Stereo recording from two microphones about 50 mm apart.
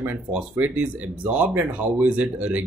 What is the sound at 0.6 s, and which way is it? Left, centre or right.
Speech, right.